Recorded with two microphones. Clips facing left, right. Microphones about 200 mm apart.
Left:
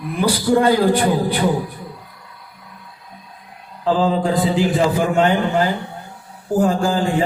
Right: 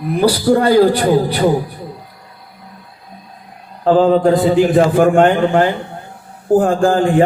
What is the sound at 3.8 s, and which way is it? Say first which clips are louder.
A man's voice: right 7 dB; 55° right (ahead or behind).